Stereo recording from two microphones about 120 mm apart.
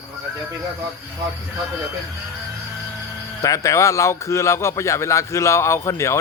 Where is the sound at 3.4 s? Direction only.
25° left (ahead or behind).